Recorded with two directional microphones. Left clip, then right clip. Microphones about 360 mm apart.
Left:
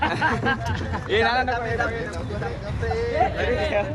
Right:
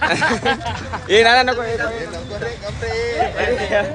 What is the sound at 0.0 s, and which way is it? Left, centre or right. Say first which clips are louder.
Speech: right 5 dB; right.